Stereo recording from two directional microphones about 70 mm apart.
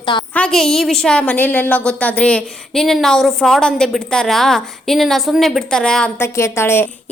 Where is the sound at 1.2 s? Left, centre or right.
Left.